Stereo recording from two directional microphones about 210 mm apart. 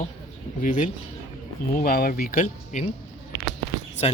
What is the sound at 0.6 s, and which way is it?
Speech, 40° left (ahead or behind).